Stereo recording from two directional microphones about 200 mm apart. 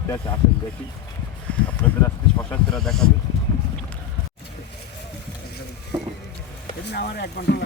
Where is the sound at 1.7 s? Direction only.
10° left (ahead or behind).